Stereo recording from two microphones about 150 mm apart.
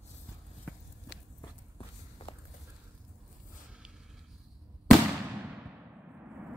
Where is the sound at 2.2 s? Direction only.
40° left (ahead or behind).